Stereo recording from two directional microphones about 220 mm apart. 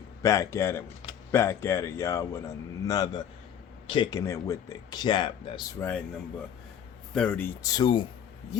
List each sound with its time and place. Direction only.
0.2 s speech: 15° left (ahead or behind)
5.8 s speech: 10° left (ahead or behind)
7.1 s speech: 5° left (ahead or behind)